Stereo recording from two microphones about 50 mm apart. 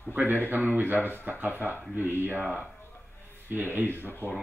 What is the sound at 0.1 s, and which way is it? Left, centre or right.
A man's voice, right.